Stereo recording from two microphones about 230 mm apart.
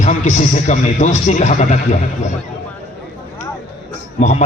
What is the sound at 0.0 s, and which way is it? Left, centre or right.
A man's voice, left.